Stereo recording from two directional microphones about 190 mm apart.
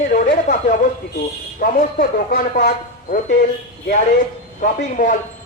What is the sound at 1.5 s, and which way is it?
Speech, 45° left (ahead or behind).